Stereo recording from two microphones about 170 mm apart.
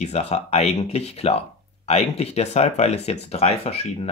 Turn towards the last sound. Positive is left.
turn(degrees=35)  # may be behind; listen again after turning